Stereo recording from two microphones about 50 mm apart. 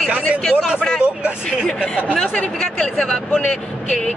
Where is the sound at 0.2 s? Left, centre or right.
Left.